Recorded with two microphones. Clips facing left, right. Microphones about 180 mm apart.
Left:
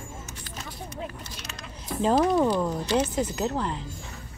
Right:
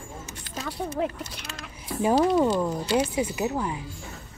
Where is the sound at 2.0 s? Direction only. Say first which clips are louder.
Right 1 dB; 5° right (ahead or behind).